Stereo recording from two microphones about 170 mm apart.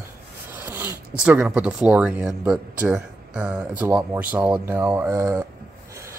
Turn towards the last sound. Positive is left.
turn(degrees=-15)  # may be behind; listen again after turning